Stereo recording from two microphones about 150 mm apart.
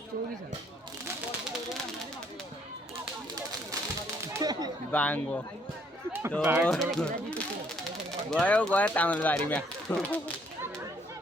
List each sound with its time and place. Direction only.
4.4 s a sound: 25° right (ahead or behind)
4.9 s speech: 10° left (ahead or behind)
6.4 s speech: 10° right (ahead or behind)
6.7 s speech: 5° left (ahead or behind)